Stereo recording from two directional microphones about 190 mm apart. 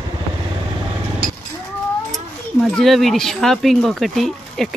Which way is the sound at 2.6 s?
Centre (ahead or behind).